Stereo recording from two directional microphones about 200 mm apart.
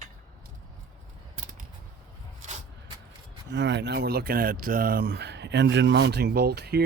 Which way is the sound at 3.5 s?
60° right (ahead or behind).